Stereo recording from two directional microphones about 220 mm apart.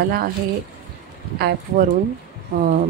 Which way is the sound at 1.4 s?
45° right (ahead or behind).